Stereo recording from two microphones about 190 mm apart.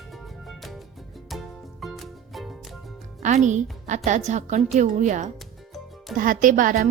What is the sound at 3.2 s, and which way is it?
A woman's voice, 40° right (ahead or behind).